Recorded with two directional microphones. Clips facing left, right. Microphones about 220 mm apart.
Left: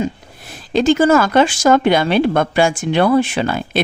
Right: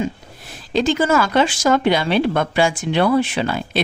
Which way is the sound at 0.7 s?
50° left (ahead or behind).